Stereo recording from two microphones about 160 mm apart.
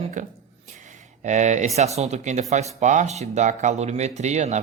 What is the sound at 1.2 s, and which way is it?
Speech, 50° right (ahead or behind).